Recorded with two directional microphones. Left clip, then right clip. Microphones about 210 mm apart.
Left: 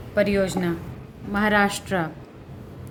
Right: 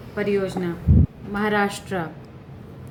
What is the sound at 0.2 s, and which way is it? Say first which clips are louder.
A woman's voice: left 2 dB; 55° left (ahead or behind).